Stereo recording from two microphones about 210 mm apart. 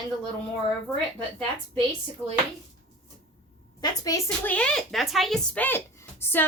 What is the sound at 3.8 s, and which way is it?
A woman's voice, 15° left (ahead or behind).